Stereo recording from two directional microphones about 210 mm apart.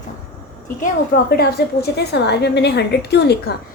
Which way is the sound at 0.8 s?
50° left (ahead or behind).